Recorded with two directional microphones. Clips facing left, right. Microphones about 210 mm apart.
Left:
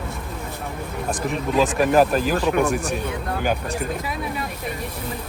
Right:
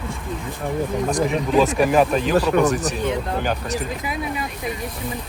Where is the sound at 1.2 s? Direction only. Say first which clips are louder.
Right 2 dB; centre (ahead or behind).